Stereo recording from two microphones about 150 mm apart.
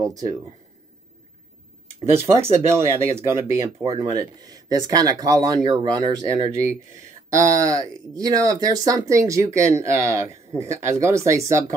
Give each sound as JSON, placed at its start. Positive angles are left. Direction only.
{"t": 0.0, "sound": "speech", "side_deg": -25}
{"t": 2.1, "sound": "speech", "side_deg": -15}
{"t": 6.5, "sound": "speech", "side_deg": -20}